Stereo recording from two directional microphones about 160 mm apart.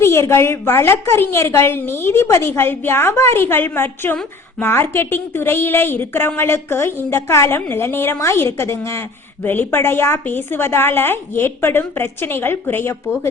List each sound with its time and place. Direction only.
0.0 s a woman's voice: 15° left (ahead or behind)